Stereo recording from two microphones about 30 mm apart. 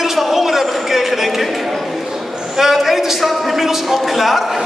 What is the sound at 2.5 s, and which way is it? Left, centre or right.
A man's voice, centre.